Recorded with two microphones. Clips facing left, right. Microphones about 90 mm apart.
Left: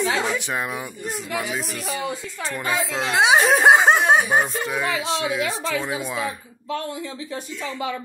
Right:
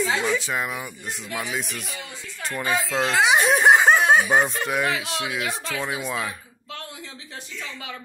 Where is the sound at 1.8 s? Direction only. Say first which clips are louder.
Left 10 dB; 40° left (ahead or behind).